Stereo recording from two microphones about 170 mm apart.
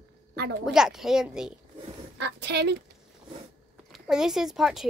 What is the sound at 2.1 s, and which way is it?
Speech, 80° right.